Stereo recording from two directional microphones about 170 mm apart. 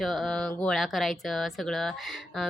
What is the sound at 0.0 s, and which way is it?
Speech, centre (ahead or behind).